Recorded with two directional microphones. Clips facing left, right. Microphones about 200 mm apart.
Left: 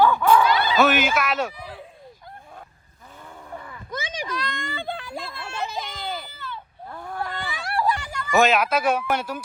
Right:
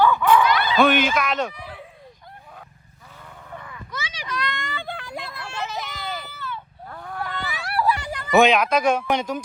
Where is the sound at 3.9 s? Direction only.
50° left (ahead or behind).